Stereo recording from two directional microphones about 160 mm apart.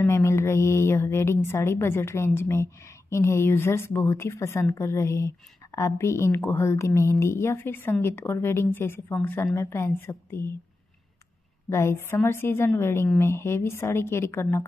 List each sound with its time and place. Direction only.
0.0 s a woman's voice: 15° left (ahead or behind)
11.7 s a woman's voice: 15° left (ahead or behind)